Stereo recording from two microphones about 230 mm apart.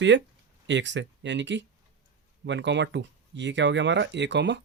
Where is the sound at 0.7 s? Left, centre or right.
Right.